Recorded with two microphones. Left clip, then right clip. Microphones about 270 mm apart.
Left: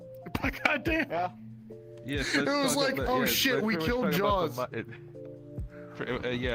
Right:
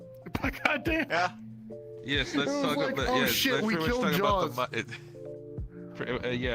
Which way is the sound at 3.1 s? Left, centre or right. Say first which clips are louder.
Even; centre.